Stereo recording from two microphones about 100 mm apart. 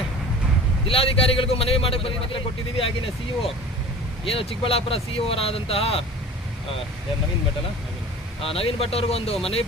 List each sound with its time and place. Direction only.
0.9 s a man's voice: 70° left (ahead or behind)
4.3 s a man's voice: 70° left (ahead or behind)
8.4 s speech: 70° left (ahead or behind)